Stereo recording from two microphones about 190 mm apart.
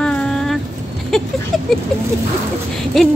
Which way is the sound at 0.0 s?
5° left (ahead or behind).